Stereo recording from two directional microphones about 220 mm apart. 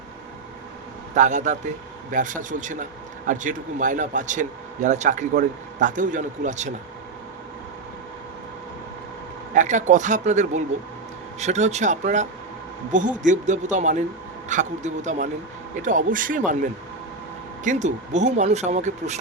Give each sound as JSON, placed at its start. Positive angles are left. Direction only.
{"t": 1.1, "sound": "speech", "side_deg": -35}
{"t": 9.6, "sound": "speech", "side_deg": -35}
{"t": 17.6, "sound": "speech", "side_deg": -35}